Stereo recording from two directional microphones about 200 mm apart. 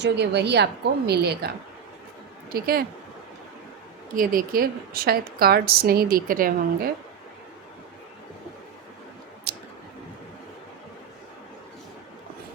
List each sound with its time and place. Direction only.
0.0 s a woman's voice: 60° right (ahead or behind)
4.1 s a woman's voice: 45° right (ahead or behind)
9.5 s clicking: 50° right (ahead or behind)